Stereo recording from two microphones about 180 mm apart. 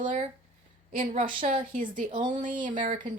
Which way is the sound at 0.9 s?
45° right (ahead or behind).